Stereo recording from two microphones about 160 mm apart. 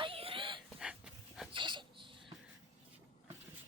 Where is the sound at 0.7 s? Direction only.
5° right (ahead or behind).